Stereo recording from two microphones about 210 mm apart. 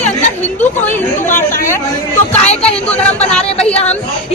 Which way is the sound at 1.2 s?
40° left (ahead or behind).